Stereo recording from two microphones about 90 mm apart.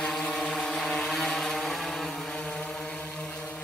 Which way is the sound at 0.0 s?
10° left (ahead or behind).